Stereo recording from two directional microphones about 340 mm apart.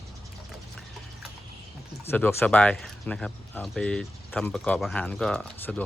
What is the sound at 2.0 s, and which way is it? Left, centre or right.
Speech, centre.